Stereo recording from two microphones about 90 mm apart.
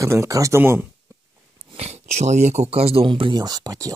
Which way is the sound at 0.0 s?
35° right (ahead or behind).